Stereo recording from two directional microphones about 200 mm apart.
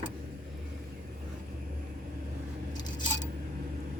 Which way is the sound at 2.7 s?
20° left (ahead or behind).